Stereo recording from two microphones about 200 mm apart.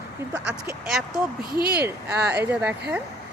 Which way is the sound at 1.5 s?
50° right (ahead or behind).